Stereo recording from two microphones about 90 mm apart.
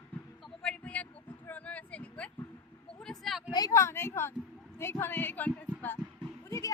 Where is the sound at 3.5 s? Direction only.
45° left (ahead or behind).